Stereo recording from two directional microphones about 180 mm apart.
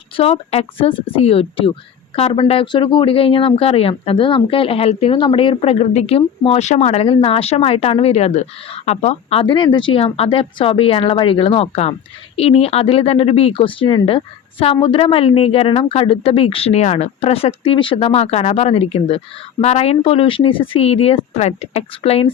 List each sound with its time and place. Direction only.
0.2 s speech: 35° left (ahead or behind)